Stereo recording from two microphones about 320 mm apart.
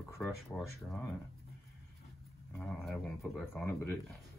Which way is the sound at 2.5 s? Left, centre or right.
Centre.